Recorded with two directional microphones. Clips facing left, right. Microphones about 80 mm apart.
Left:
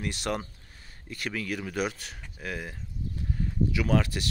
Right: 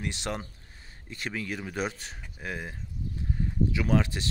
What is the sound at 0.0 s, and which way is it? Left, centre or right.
Speech, right.